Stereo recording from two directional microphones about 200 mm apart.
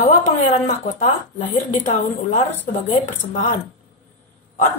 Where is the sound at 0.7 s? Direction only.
40° left (ahead or behind).